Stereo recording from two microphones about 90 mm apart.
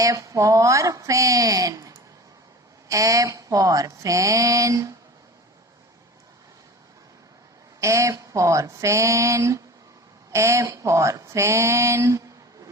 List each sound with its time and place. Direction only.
0.0 s speech: 40° right (ahead or behind)
7.8 s speech: 35° right (ahead or behind)